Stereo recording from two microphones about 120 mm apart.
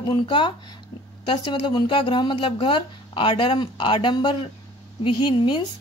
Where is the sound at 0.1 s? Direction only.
45° left (ahead or behind).